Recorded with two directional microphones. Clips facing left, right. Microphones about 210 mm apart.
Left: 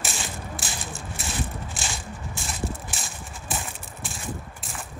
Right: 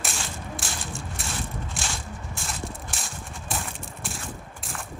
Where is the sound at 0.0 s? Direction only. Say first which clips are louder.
Left 1 dB; centre (ahead or behind).